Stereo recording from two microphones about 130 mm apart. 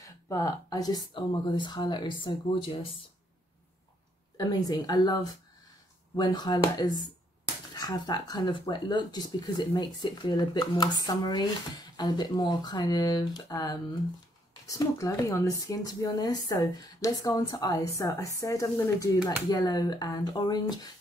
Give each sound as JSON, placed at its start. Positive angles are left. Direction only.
{"t": 0.0, "sound": "speech", "side_deg": 25}
{"t": 4.4, "sound": "speech", "side_deg": 30}